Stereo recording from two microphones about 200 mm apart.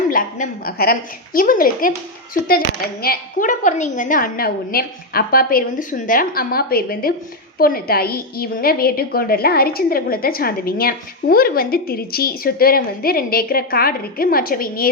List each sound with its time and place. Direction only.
0.1 s a woman's voice: 40° left (ahead or behind)
3.0 s a woman's voice: 45° left (ahead or behind)